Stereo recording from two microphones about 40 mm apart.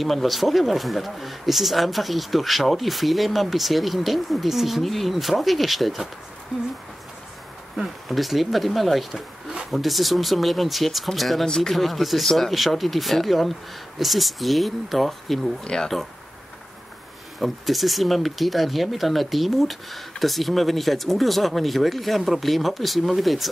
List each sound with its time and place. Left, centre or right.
0.0 s speech: centre
7.7 s speech: centre
11.4 s speech: centre
11.7 s speech: centre
15.6 s speech: centre
17.4 s speech: centre